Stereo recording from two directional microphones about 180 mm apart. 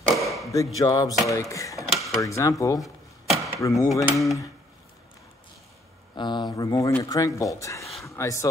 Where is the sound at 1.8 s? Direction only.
Centre (ahead or behind).